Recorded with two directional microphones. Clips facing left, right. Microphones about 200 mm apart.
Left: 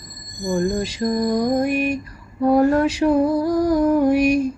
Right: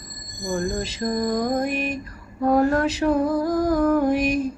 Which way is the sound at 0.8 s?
15° left (ahead or behind).